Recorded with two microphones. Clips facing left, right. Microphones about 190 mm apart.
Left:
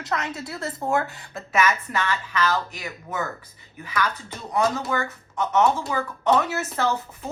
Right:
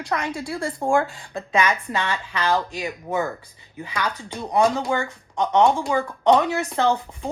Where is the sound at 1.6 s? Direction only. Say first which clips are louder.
Even; 15° right (ahead or behind).